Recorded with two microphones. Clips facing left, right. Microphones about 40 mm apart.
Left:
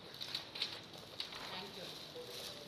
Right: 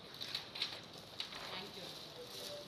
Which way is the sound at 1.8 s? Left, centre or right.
Left.